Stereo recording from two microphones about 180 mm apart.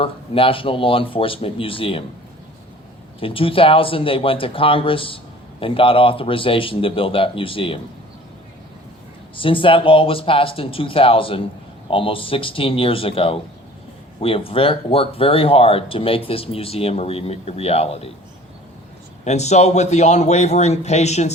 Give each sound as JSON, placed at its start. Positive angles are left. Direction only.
{"t": 0.0, "sound": "speech", "side_deg": 30}
{"t": 3.2, "sound": "speech", "side_deg": 30}
{"t": 9.3, "sound": "speech", "side_deg": 30}
{"t": 19.2, "sound": "speech", "side_deg": 40}